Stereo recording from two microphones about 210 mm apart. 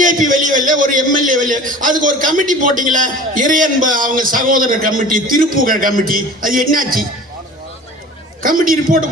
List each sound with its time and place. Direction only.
0.0 s a man's voice: 40° right (ahead or behind)
8.4 s a man's voice: 40° right (ahead or behind)